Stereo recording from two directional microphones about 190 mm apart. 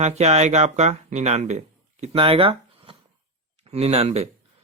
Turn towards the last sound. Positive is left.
turn(degrees=-35)  # may be behind; listen again after turning